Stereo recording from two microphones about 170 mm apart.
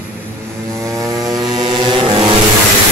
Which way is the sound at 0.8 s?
20° right (ahead or behind).